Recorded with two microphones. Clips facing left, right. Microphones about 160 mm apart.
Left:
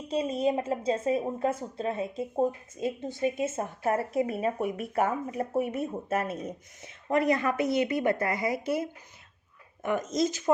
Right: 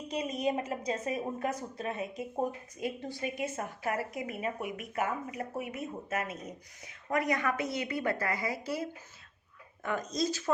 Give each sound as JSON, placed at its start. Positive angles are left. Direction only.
{"t": 0.1, "sound": "a woman's voice", "side_deg": 30}